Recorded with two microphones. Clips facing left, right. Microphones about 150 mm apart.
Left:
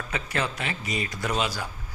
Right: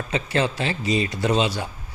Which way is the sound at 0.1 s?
25° right (ahead or behind).